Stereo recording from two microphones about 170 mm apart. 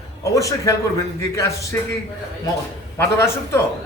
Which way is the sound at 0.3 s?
20° left (ahead or behind).